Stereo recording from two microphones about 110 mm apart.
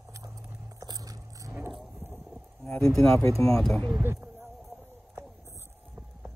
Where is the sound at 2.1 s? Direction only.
5° left (ahead or behind).